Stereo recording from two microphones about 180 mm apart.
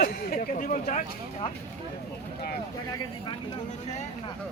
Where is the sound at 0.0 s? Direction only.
50° left (ahead or behind).